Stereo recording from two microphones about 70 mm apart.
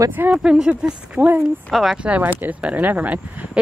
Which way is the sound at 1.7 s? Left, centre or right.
Centre.